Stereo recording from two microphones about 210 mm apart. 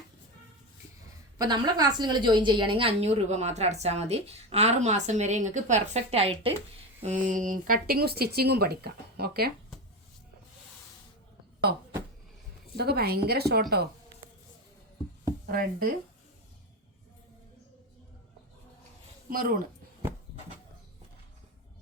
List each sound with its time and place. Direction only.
1.4 s a woman's voice: 20° right (ahead or behind); by 9.5 s 50° right (ahead or behind)
12.7 s speech: 50° right (ahead or behind)
15.4 s speech: 45° right (ahead or behind)
19.3 s speech: 40° right (ahead or behind)